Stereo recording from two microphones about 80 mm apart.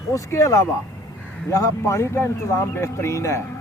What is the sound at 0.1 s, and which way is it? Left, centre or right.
Speech, left.